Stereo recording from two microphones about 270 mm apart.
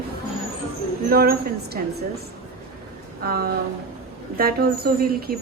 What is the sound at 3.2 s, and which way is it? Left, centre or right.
A woman's voice, right.